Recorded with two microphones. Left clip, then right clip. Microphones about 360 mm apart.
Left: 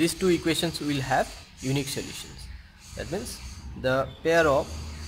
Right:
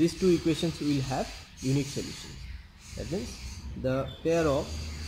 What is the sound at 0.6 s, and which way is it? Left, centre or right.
Speech, left.